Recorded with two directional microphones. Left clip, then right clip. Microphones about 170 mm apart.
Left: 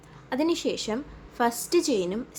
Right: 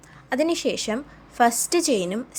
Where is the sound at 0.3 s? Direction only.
20° right (ahead or behind).